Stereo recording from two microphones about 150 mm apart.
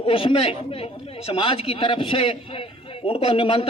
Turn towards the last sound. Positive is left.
turn(degrees=35)  # may be behind; listen again after turning